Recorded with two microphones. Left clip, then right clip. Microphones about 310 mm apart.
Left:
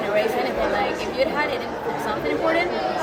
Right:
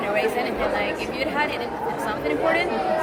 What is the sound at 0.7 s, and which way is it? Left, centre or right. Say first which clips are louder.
Speech: left 3 dB; centre.